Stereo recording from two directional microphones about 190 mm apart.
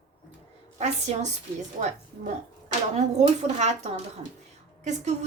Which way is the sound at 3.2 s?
35° right (ahead or behind).